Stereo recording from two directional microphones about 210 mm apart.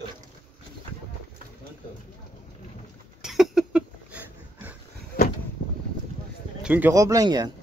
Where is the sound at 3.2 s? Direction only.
Centre (ahead or behind).